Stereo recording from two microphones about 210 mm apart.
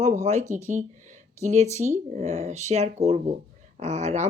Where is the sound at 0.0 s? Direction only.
35° right (ahead or behind).